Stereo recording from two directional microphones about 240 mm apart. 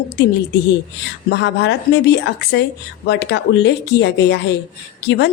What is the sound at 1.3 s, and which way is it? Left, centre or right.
A woman's voice, left.